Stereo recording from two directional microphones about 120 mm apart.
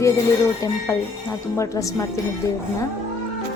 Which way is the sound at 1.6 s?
30° left (ahead or behind).